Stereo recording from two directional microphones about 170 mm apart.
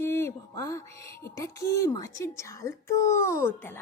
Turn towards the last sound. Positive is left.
turn(degrees=15)  # may be behind; listen again after turning